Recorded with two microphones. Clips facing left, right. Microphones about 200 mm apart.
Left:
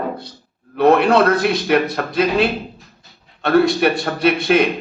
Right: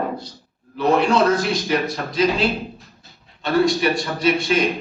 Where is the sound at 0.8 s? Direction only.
60° left (ahead or behind).